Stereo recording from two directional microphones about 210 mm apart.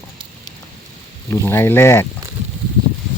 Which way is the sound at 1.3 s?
10° left (ahead or behind).